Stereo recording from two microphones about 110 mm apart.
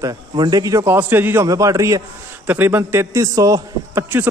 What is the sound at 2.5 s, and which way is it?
A man's voice, 20° right (ahead or behind).